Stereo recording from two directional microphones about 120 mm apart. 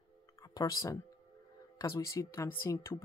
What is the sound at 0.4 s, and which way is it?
Speech, 30° left (ahead or behind).